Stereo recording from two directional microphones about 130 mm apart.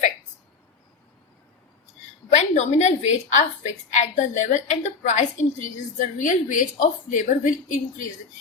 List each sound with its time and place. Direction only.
2.3 s a woman's voice: 60° left (ahead or behind)
6.1 s a woman's voice: 80° left